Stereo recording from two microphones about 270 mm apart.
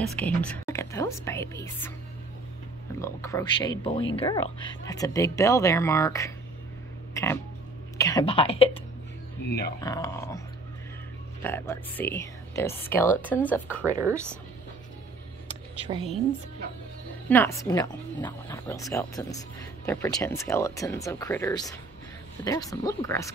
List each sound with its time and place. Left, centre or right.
0.0 s speech: centre
3.0 s speech: centre
8.0 s speech: centre
9.8 s speech: centre
11.4 s speech: centre
13.9 s speech: centre
15.4 s a sound: centre
17.3 s speech: centre